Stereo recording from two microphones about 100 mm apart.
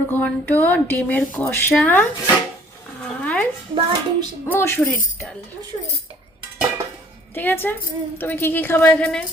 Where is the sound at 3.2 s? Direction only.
15° left (ahead or behind).